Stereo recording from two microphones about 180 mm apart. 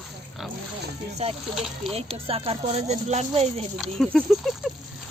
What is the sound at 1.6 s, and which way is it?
Speech, centre (ahead or behind).